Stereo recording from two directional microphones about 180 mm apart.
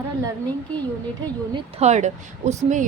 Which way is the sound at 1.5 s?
35° right (ahead or behind).